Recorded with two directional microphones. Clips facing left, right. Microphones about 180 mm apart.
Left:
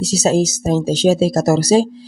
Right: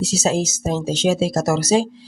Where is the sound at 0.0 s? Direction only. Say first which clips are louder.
Left 5 dB; 35° left (ahead or behind).